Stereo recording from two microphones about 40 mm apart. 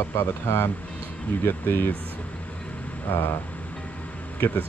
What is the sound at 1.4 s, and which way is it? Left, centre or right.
Speech, left.